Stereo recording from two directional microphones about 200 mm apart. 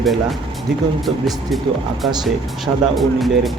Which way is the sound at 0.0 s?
Centre (ahead or behind).